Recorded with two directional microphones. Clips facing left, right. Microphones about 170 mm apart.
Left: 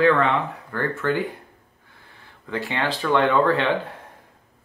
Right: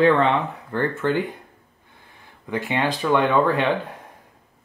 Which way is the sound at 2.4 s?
15° right (ahead or behind).